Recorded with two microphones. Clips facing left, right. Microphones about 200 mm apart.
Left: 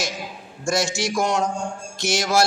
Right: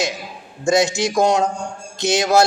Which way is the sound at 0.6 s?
20° right (ahead or behind).